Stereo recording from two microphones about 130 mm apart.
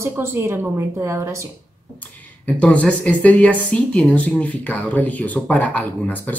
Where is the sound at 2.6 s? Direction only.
10° left (ahead or behind).